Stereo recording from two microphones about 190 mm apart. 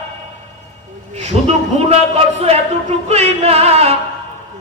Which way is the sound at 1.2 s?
30° right (ahead or behind).